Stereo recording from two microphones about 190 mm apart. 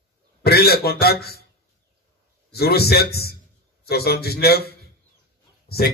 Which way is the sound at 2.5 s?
55° left (ahead or behind).